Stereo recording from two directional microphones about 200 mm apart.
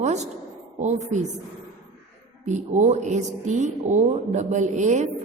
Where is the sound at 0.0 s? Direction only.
35° right (ahead or behind).